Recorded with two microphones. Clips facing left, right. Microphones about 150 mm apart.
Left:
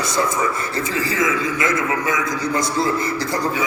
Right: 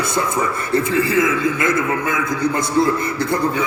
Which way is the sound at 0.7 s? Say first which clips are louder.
Right 9 dB; 60° right (ahead or behind).